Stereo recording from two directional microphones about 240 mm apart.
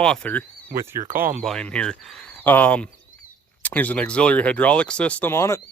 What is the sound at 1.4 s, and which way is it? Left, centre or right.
Speech, centre.